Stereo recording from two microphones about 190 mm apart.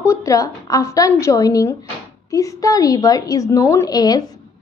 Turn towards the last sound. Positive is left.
turn(degrees=20)  # may be behind; listen again after turning